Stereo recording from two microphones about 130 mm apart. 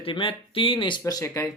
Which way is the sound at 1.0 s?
25° left (ahead or behind).